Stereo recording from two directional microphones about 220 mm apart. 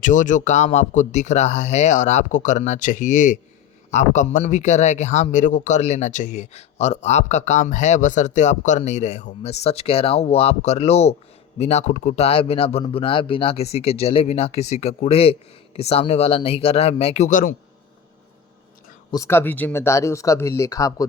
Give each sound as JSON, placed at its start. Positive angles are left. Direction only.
{"t": 0.0, "sound": "speech", "side_deg": 35}
{"t": 19.1, "sound": "speech", "side_deg": 10}